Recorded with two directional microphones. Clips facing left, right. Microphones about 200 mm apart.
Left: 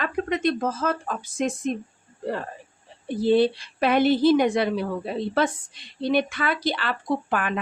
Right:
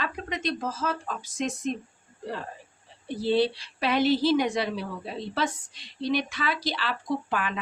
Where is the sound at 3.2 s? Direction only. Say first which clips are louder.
Left 5 dB; 50° left (ahead or behind).